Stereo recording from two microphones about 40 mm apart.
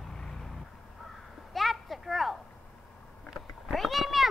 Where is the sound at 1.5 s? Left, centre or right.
Centre.